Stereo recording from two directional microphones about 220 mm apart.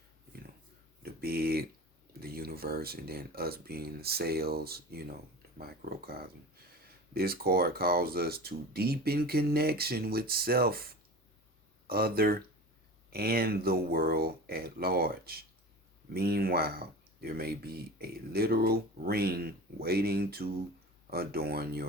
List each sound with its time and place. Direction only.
1.0 s a sound: 45° right (ahead or behind)
2.1 s speech: 45° right (ahead or behind)
11.9 s speech: 45° right (ahead or behind)